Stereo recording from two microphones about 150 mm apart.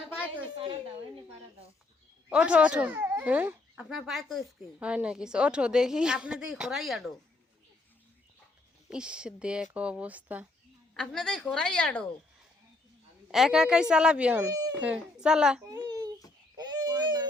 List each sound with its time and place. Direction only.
0.5 s a sound: 35° right (ahead or behind)
2.3 s speech: 10° right (ahead or behind)
8.9 s speech: 5° right (ahead or behind)
10.9 s speech: 5° left (ahead or behind)
13.3 s speech: centre (ahead or behind)
15.6 s babbling: 25° right (ahead or behind)